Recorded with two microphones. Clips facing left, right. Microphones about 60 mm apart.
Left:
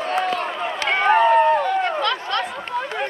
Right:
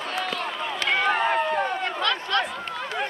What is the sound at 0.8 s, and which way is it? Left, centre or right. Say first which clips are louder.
Run: left 7 dB; left.